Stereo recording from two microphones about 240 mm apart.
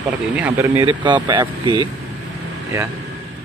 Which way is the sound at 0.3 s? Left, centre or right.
Centre.